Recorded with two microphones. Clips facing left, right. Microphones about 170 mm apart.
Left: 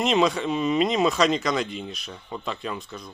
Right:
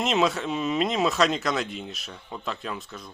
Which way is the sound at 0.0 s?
Centre (ahead or behind).